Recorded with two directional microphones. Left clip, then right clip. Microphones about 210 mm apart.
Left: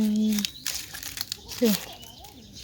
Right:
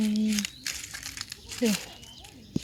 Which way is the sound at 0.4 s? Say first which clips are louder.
Left 3 dB; 20° left (ahead or behind).